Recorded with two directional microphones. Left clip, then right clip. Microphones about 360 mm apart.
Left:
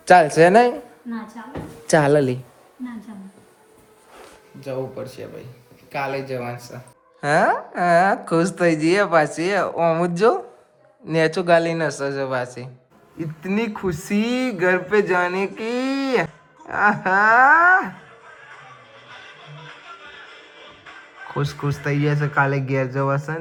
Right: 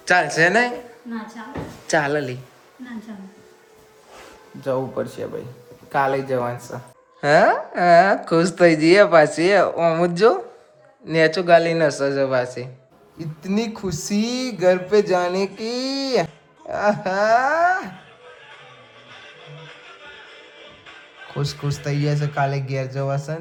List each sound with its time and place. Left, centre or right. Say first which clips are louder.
0.0 s a woman's voice: left 4 dB; centre
1.9 s a woman's voice: left 4 dB; centre
7.2 s speech: right 3 dB; centre
19.1 s music: even; centre